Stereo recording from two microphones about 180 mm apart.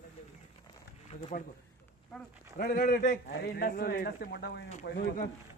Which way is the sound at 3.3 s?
60° left (ahead or behind).